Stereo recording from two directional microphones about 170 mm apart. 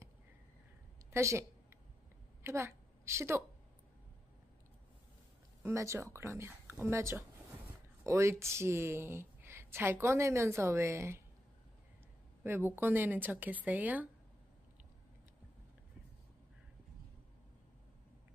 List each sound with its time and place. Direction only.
1.1 s speech: 15° right (ahead or behind)
2.4 s a woman's voice: 15° right (ahead or behind)
5.6 s speech: 15° right (ahead or behind)
12.4 s speech: 15° right (ahead or behind)